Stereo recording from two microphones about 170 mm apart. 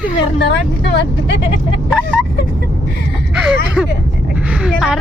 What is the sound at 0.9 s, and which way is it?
Speech, 90° left.